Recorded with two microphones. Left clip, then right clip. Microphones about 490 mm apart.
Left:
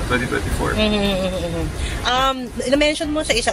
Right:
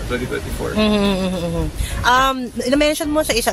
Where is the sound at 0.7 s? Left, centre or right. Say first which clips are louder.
Right 3 dB; right.